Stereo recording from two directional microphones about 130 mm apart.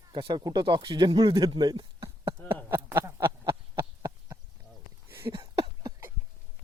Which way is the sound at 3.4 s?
35° right (ahead or behind).